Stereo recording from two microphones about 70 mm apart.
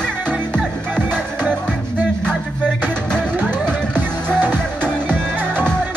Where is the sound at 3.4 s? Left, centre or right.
Right.